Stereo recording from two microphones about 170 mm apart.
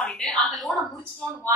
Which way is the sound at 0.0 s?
5° left (ahead or behind).